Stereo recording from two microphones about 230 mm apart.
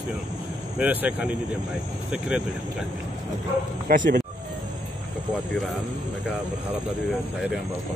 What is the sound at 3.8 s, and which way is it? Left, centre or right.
Speech, right.